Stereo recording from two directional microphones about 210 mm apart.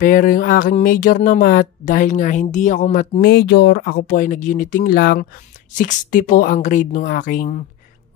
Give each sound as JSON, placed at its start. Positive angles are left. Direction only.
{"t": 0.0, "sound": "speech", "side_deg": 40}